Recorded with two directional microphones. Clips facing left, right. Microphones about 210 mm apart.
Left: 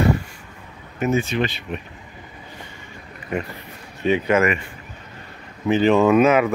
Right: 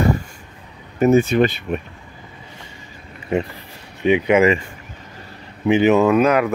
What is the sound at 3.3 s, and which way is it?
Speech, 25° right (ahead or behind).